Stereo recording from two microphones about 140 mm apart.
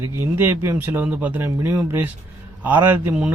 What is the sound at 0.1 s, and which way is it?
Speech, 15° right (ahead or behind).